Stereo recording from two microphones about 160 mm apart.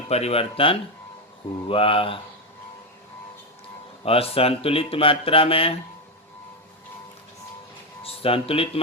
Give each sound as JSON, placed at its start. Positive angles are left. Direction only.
{"t": 0.1, "sound": "speech", "side_deg": 40}
{"t": 4.0, "sound": "speech", "side_deg": 35}
{"t": 8.0, "sound": "speech", "side_deg": 35}